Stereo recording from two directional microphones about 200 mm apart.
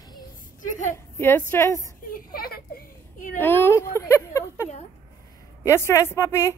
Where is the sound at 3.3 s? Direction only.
10° left (ahead or behind).